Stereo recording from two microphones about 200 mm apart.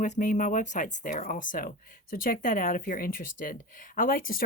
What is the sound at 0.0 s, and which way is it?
Speech, 40° left (ahead or behind).